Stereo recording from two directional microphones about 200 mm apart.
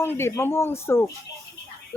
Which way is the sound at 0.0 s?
10° left (ahead or behind).